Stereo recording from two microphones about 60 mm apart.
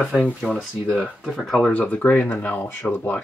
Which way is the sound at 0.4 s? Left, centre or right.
Centre.